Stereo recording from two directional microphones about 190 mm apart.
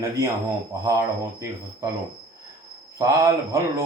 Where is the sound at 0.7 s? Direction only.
15° right (ahead or behind).